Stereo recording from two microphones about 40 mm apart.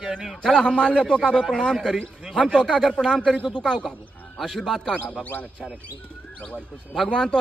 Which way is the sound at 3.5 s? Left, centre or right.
Centre.